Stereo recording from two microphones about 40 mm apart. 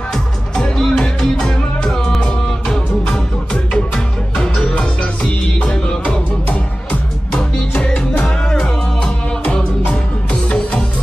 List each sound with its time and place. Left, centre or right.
0.6 s music: centre
3.7 s music: centre